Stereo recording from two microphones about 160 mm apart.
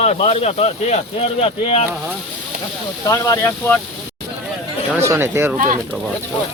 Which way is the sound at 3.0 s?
20° left (ahead or behind).